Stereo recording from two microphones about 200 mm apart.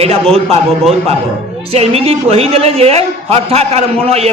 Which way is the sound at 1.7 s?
30° right (ahead or behind).